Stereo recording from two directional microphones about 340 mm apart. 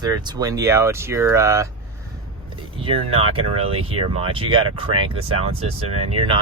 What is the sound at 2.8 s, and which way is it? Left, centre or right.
Speech, centre.